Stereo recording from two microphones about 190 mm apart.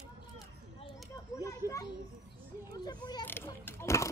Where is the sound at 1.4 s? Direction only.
15° left (ahead or behind).